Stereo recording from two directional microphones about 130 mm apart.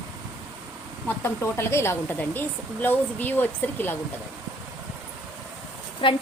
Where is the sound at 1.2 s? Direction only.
20° left (ahead or behind).